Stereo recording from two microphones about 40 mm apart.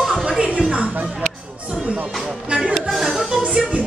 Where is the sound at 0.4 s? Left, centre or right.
Right.